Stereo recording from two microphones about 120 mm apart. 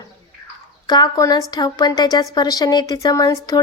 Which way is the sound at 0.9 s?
35° left (ahead or behind).